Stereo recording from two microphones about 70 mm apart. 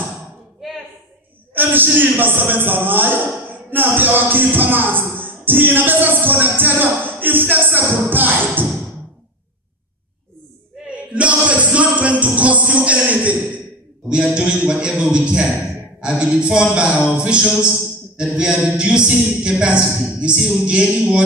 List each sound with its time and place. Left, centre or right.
1.5 s a man's voice: right
3.7 s music: right
11.1 s music: centre
14.0 s a man's voice: centre
16.0 s a sound: centre